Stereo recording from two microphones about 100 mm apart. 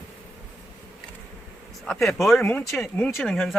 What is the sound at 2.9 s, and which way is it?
Speech, 15° left (ahead or behind).